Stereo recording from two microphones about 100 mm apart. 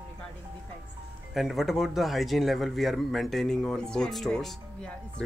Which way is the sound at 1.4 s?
Centre (ahead or behind).